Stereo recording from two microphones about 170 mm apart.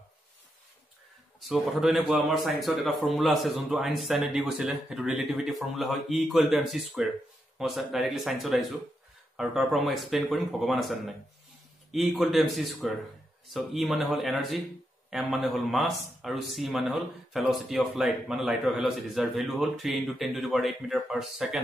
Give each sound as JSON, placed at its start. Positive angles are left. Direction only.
{"t": 1.5, "sound": "speech", "side_deg": 0}